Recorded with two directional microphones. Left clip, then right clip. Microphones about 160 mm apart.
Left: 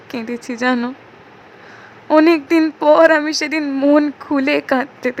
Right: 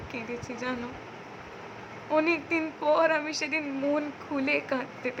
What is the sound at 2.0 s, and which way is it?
Speech, 75° left (ahead or behind).